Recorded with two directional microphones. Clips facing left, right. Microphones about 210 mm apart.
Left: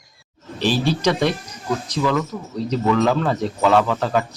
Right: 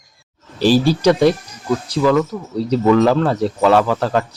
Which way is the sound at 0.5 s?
35° right (ahead or behind).